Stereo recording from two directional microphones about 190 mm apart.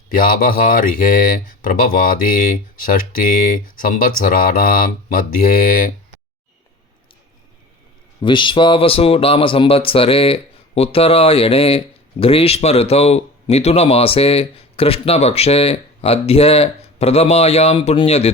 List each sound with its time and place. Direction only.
0.1 s speech: 45° left (ahead or behind)
8.2 s speech: 25° left (ahead or behind)